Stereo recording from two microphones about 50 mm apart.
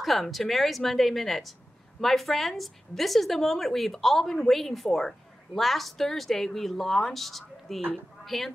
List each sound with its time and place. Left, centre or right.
0.0 s a woman's voice: centre